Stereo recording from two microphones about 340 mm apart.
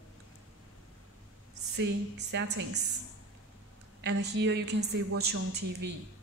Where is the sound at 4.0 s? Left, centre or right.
Right.